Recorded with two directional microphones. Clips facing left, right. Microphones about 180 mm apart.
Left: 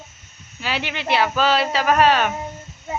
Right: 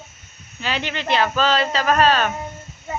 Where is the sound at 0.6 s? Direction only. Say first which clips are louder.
Even; 10° left (ahead or behind).